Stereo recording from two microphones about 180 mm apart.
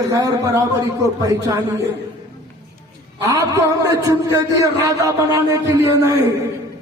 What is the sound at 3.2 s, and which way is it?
A man's voice, 15° right (ahead or behind).